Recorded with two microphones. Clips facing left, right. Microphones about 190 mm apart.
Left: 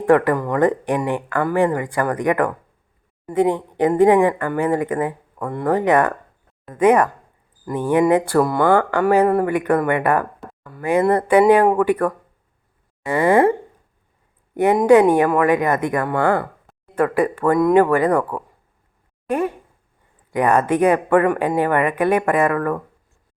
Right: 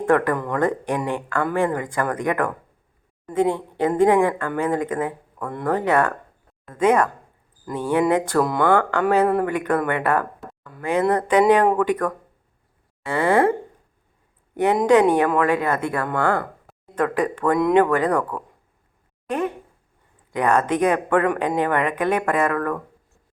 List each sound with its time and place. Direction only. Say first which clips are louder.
0.1 s speech: left 4 dB; 15° left (ahead or behind)
10.4 s a sound: left 2 dB; centre (ahead or behind)
10.8 s speech: left 3 dB; 10° left (ahead or behind)
14.5 s speech: left 4 dB; 10° left (ahead or behind)